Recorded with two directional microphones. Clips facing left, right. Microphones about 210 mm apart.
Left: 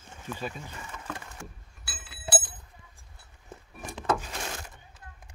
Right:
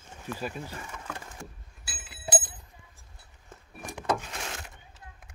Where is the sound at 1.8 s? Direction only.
15° right (ahead or behind).